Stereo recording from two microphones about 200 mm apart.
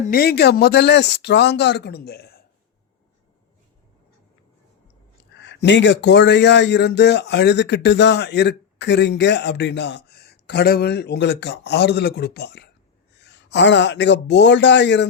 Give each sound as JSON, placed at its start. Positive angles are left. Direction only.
{"t": 0.0, "sound": "speech", "side_deg": 50}
{"t": 5.4, "sound": "speech", "side_deg": 60}